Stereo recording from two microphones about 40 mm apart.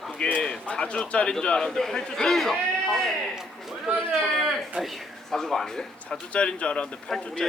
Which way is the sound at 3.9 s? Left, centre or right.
Right.